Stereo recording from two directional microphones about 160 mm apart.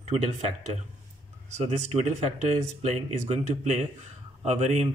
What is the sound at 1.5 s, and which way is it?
Speech, 40° right (ahead or behind).